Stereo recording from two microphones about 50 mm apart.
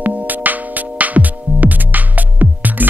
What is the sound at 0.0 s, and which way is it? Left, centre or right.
Music, right.